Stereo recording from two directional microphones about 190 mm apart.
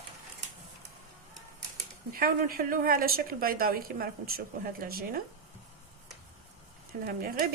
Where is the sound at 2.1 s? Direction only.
50° right (ahead or behind).